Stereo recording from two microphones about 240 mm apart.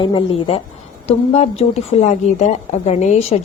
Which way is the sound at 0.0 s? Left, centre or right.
Left.